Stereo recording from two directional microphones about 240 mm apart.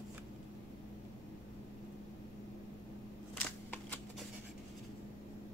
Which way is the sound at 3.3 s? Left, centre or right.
Centre.